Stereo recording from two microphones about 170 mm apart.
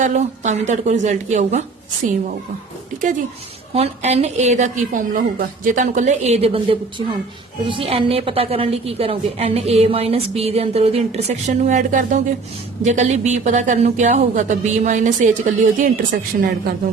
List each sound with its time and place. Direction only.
0.0 s a woman's voice: 45° right (ahead or behind)
3.8 s a woman's voice: 40° right (ahead or behind); by 16.5 s 55° right (ahead or behind)